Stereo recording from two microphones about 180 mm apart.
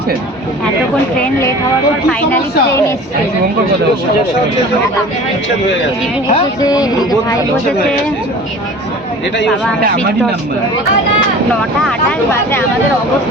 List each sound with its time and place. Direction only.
2.0 s a woman's voice: 10° left (ahead or behind)
6.2 s speech: 25° left (ahead or behind)
12.3 s a woman's voice: 10° left (ahead or behind)